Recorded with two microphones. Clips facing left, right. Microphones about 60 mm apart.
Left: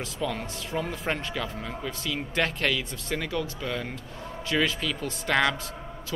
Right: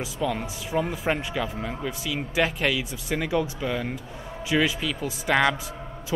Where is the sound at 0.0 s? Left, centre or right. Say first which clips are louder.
Right 3 dB; centre.